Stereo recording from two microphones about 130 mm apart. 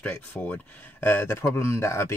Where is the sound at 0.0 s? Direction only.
15° left (ahead or behind).